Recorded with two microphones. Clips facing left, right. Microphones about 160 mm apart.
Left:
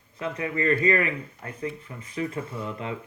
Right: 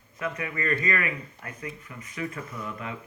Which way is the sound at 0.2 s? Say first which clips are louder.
Left 3 dB; 30° left (ahead or behind).